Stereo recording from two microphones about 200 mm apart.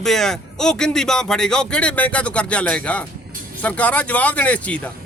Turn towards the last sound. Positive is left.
turn(degrees=5)  # may be behind; listen again after turning